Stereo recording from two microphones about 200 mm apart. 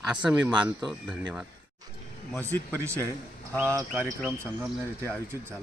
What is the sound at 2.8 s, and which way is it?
Speech, 15° right (ahead or behind).